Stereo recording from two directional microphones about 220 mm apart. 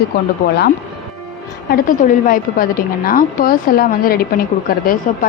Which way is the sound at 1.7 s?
40° left (ahead or behind).